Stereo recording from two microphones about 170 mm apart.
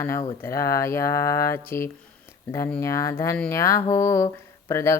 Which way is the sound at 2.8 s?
20° left (ahead or behind).